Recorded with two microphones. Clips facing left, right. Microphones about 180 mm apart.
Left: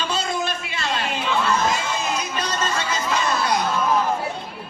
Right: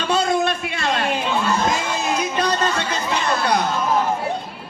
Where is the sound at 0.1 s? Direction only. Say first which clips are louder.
Right 6 dB; 55° right (ahead or behind).